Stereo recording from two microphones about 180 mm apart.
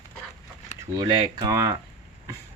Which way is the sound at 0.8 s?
25° right (ahead or behind).